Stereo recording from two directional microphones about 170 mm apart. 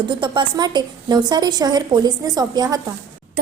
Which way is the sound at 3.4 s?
65° right (ahead or behind).